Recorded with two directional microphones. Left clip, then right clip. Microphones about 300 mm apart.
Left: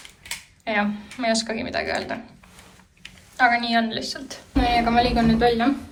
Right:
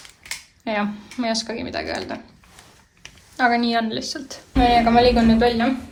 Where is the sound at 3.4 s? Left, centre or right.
Centre.